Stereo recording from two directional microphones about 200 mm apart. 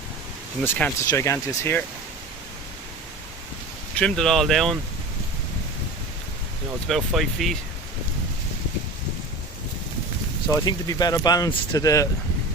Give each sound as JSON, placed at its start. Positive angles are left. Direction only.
{"t": 0.6, "sound": "speech", "side_deg": 10}
{"t": 3.9, "sound": "speech", "side_deg": 5}
{"t": 6.8, "sound": "speech", "side_deg": 0}
{"t": 10.5, "sound": "speech", "side_deg": 20}